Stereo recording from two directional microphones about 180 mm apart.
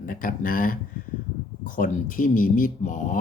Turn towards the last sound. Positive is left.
turn(degrees=45)  # may be behind; listen again after turning